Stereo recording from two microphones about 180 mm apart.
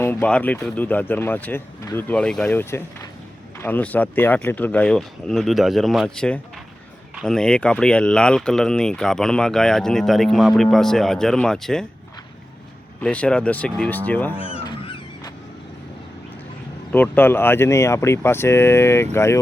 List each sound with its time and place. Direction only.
0.0 s speech: 10° left (ahead or behind)
13.0 s speech: 5° left (ahead or behind)
14.4 s music: 30° left (ahead or behind)
16.9 s speech: 10° left (ahead or behind)